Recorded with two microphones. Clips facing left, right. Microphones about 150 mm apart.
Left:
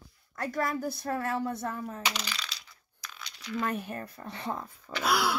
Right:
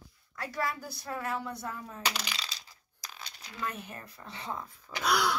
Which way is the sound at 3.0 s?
35° right (ahead or behind).